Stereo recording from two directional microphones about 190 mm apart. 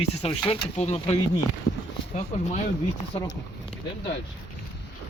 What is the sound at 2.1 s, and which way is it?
Speech, 40° left (ahead or behind).